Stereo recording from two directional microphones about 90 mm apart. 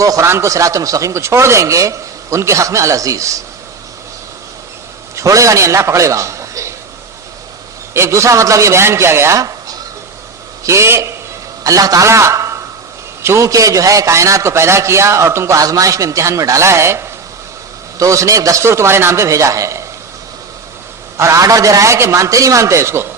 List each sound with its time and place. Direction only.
0.0 s a man's voice: 35° right (ahead or behind)
5.1 s a man's voice: 35° right (ahead or behind)
7.9 s a man's voice: 30° right (ahead or behind)
11.6 s a man's voice: 40° right (ahead or behind)
18.0 s a man's voice: 35° right (ahead or behind)
21.2 s a man's voice: 35° right (ahead or behind)